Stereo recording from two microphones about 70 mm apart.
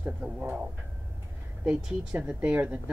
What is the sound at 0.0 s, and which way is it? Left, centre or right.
Speech, right.